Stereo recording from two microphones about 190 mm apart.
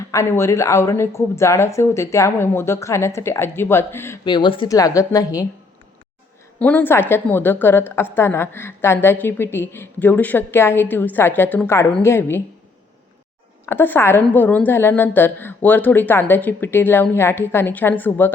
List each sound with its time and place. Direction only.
0.0 s a woman's voice: 15° left (ahead or behind)
4.3 s a woman's voice: 25° left (ahead or behind)
6.6 s a woman's voice: 10° left (ahead or behind)
13.7 s a woman's voice: 10° left (ahead or behind)